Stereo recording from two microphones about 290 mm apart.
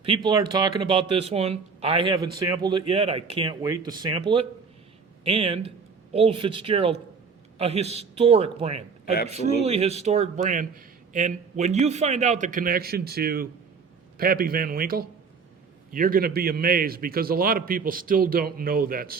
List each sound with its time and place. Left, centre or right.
0.0 s speech: centre
9.0 s a man's voice: left
9.3 s a man's voice: right